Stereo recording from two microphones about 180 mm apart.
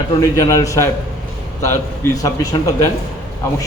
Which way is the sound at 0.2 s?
20° left (ahead or behind).